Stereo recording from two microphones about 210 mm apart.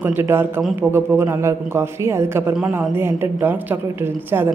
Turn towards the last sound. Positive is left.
turn(degrees=-15)  # may be behind; listen again after turning